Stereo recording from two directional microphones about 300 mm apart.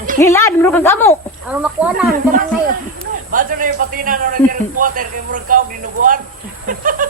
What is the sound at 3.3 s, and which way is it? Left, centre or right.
A man's voice, right.